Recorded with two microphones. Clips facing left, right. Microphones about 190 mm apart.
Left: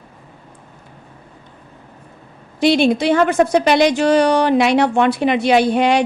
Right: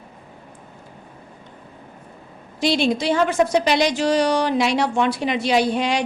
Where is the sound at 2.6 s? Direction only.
60° left (ahead or behind).